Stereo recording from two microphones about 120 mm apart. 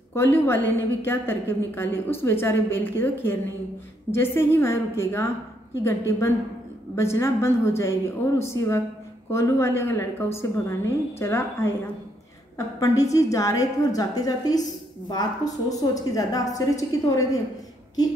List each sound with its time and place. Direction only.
0.1 s a woman's voice: 20° left (ahead or behind)